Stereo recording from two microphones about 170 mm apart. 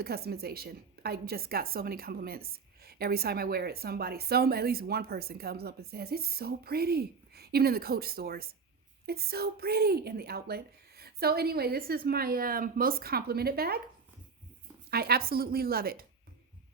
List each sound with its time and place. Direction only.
0.0 s a woman's voice: 65° right (ahead or behind)
14.8 s a woman's voice: 65° right (ahead or behind)